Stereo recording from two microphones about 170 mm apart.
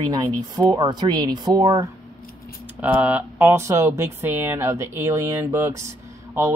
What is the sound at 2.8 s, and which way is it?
Speech, 10° right (ahead or behind).